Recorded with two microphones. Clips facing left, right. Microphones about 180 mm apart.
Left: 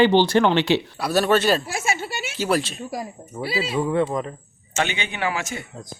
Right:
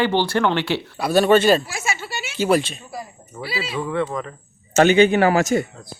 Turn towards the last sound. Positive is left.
turn(degrees=-40)  # may be behind; listen again after turning